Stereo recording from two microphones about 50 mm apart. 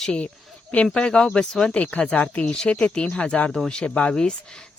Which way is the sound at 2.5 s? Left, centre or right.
Centre.